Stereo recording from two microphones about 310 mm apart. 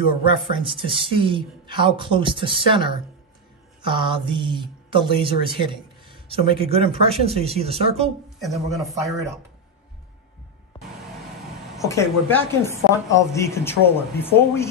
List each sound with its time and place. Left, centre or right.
0.5 s speech: centre
8.5 s speech: centre
11.9 s a woman's voice: centre